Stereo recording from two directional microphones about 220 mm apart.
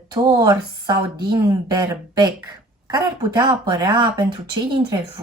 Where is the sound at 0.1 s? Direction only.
20° right (ahead or behind).